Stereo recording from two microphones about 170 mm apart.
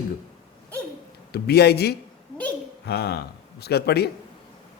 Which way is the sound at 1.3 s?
70° left (ahead or behind).